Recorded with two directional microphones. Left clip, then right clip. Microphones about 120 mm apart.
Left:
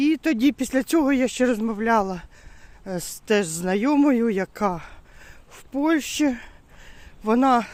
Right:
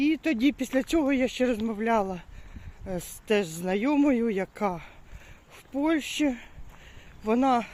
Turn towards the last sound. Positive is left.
turn(degrees=55)  # may be behind; listen again after turning